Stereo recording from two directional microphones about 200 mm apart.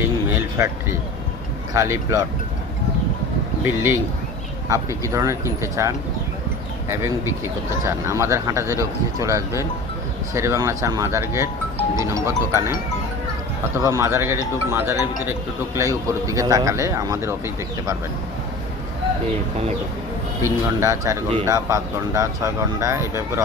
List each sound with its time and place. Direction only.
0.3 s a sound: 10° right (ahead or behind)
1.8 s a man's voice: 15° right (ahead or behind)
3.6 s a man's voice: 10° right (ahead or behind)
7.8 s a man's voice: 15° right (ahead or behind)
13.7 s a man's voice: 15° right (ahead or behind)
20.4 s a man's voice: 15° right (ahead or behind)